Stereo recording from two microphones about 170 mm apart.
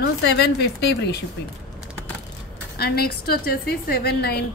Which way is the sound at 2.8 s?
70° left (ahead or behind).